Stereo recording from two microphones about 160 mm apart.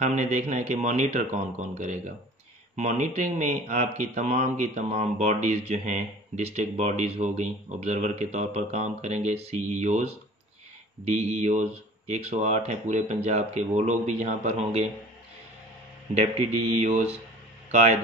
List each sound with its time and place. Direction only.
0.0 s speech: 50° right (ahead or behind)
16.2 s speech: 45° right (ahead or behind)